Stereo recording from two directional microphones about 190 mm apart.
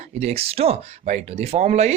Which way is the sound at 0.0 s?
35° right (ahead or behind).